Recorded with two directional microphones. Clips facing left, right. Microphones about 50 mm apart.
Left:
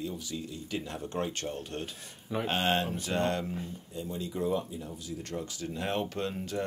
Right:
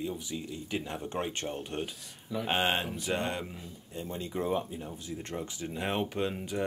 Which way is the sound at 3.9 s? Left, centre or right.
Right.